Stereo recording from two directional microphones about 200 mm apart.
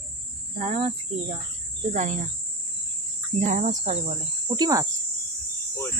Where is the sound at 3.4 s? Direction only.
35° right (ahead or behind).